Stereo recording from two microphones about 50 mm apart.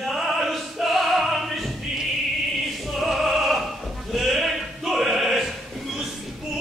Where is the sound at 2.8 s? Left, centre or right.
Centre.